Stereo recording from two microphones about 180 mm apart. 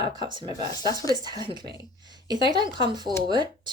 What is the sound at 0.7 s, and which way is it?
Speech, 20° left (ahead or behind).